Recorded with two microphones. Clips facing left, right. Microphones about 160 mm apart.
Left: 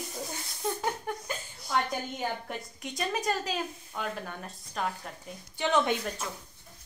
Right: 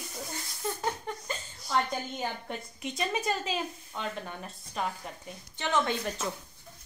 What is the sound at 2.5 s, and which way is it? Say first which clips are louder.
A woman's voice: right 1 dB; centre (ahead or behind).